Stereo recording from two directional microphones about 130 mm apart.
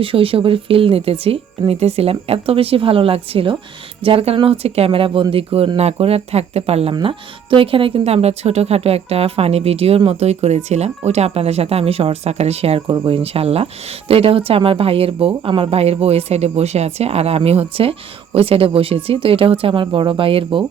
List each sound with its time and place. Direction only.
0.0 s speech: 45° right (ahead or behind)